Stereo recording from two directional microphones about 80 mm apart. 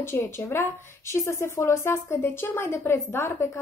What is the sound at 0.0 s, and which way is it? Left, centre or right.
A woman's voice, left.